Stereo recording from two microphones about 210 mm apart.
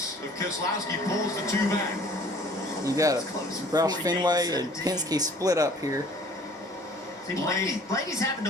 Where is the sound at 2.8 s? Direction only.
15° right (ahead or behind).